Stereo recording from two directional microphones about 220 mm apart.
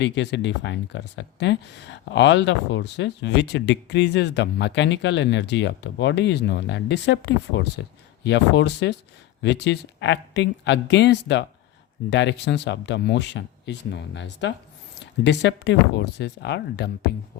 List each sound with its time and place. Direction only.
0.0 s speech: 55° left (ahead or behind)